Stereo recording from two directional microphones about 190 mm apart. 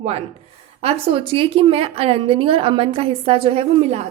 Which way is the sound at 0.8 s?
30° right (ahead or behind).